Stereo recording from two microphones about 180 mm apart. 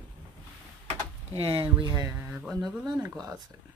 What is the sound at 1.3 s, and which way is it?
Speech, 30° right (ahead or behind).